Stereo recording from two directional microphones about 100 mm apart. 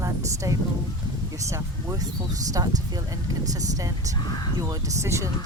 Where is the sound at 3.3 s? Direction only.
35° right (ahead or behind).